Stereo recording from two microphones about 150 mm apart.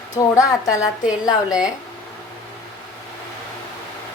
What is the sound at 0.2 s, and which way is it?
Speech, 25° left (ahead or behind).